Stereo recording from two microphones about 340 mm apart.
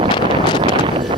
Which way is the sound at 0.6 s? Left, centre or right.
Centre.